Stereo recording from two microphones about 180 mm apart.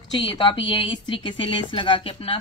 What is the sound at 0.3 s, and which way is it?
A woman's voice, 30° left (ahead or behind).